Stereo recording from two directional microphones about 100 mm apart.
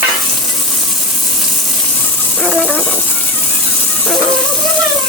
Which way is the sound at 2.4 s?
Centre (ahead or behind).